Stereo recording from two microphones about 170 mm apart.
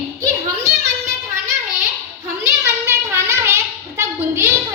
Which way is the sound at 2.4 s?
15° right (ahead or behind).